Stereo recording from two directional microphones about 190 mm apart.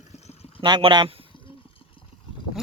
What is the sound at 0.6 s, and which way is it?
Speech, 25° right (ahead or behind).